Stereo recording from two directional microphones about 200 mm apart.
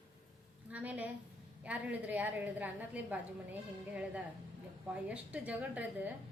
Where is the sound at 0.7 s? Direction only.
5° right (ahead or behind).